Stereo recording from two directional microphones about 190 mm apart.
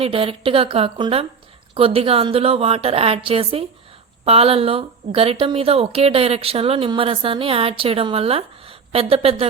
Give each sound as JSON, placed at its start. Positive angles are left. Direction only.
{"t": 0.0, "sound": "speech", "side_deg": -30}